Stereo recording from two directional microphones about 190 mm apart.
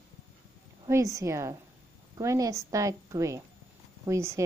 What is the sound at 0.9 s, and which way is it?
A woman's voice, 15° right (ahead or behind).